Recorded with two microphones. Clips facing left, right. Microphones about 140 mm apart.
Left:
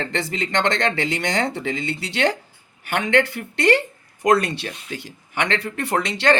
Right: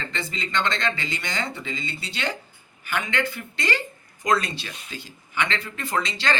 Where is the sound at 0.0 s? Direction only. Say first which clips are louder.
Left 7 dB; 75° left (ahead or behind).